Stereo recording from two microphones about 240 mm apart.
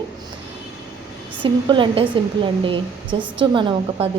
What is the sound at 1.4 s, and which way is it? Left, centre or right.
A woman's voice, right.